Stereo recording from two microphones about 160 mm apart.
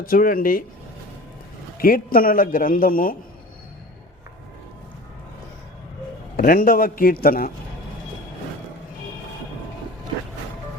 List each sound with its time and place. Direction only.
0.0 s a man's voice: 65° left (ahead or behind)
1.8 s a man's voice: 65° left (ahead or behind)
6.3 s a man's voice: 65° left (ahead or behind)